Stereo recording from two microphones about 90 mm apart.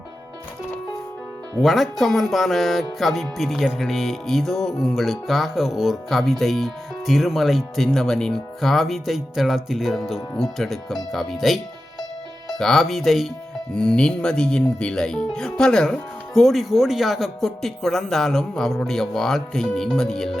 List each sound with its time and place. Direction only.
1.6 s speech: centre (ahead or behind)